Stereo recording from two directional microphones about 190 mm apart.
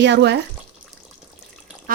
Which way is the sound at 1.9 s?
50° right (ahead or behind).